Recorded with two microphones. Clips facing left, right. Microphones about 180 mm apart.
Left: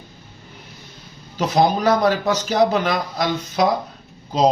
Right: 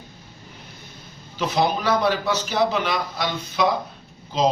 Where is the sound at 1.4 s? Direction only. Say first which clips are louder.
Left 4 dB; 45° left (ahead or behind).